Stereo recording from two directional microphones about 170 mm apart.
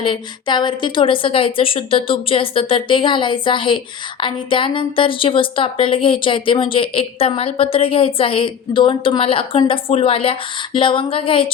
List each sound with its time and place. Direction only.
0.0 s a woman's voice: 30° left (ahead or behind)